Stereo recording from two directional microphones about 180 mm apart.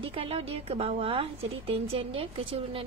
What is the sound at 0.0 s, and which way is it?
Speech, 30° right (ahead or behind).